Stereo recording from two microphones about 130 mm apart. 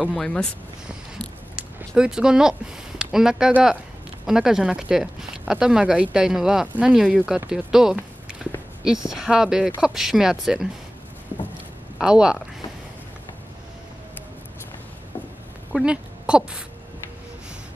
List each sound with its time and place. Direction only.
0.0 s speech: 5° left (ahead or behind)
1.8 s speech: 5° right (ahead or behind)
12.0 s speech: 5° right (ahead or behind)
15.7 s speech: 5° right (ahead or behind)